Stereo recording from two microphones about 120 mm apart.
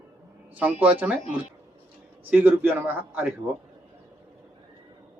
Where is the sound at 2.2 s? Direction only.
15° right (ahead or behind).